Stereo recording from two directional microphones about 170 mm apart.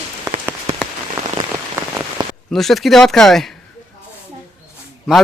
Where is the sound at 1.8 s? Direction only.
15° right (ahead or behind).